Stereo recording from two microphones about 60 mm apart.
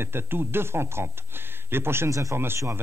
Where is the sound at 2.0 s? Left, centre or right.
Right.